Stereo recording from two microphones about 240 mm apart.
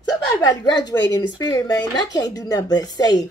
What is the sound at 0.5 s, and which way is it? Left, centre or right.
A woman's voice, centre.